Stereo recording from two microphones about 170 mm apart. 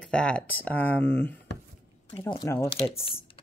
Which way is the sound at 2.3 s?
20° left (ahead or behind).